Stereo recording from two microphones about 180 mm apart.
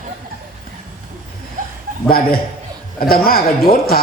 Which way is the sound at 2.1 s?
55° left (ahead or behind).